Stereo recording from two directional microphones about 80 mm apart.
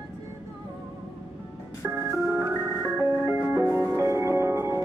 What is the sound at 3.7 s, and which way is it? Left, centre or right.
Music, right.